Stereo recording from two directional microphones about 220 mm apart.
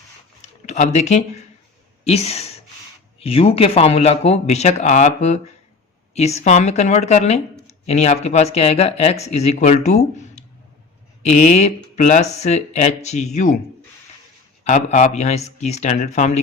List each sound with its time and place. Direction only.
0.6 s speech: 30° left (ahead or behind)
14.6 s speech: 30° left (ahead or behind)